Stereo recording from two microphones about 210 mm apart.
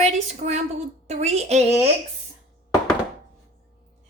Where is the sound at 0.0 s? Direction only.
35° right (ahead or behind).